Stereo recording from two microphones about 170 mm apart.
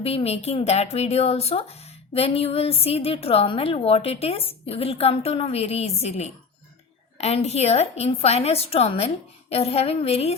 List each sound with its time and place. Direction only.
0.0 s speech: 35° left (ahead or behind)